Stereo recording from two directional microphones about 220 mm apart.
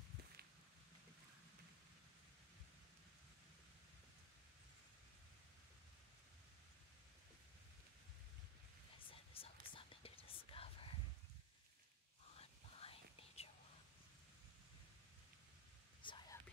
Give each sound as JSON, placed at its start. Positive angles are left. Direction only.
{"t": 9.1, "sound": "whispering", "side_deg": 25}
{"t": 12.4, "sound": "whispering", "side_deg": 25}
{"t": 16.0, "sound": "whispering", "side_deg": 20}